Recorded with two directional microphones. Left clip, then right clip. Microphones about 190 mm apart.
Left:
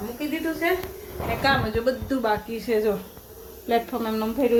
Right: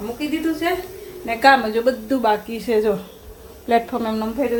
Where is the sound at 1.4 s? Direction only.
45° right (ahead or behind).